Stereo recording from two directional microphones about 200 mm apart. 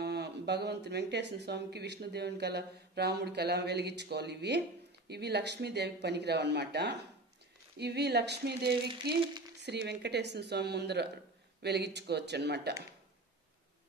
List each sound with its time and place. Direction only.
0.0 s speech: 55° right (ahead or behind)
8.6 s a sound: 25° right (ahead or behind)
9.6 s speech: 55° right (ahead or behind)